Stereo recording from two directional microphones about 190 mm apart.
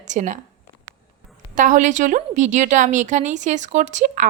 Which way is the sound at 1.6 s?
40° right (ahead or behind).